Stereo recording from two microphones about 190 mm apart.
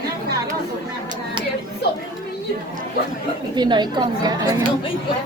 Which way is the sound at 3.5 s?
20° right (ahead or behind).